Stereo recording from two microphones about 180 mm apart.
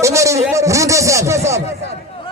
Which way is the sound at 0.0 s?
15° right (ahead or behind).